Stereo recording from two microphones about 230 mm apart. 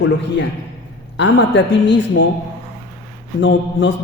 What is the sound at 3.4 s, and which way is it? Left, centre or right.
Speech, left.